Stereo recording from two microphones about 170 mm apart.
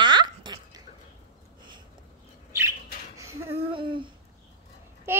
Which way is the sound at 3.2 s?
15° right (ahead or behind).